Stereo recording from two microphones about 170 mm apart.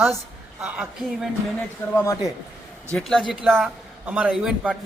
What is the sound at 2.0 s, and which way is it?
Speech, 15° left (ahead or behind).